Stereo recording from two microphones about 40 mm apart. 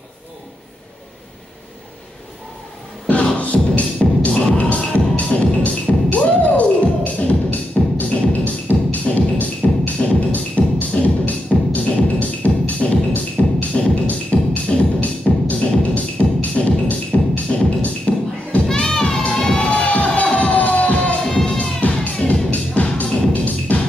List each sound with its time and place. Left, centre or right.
3.1 s music: left
17.6 s music: left
18.7 s music: centre
19.5 s music: left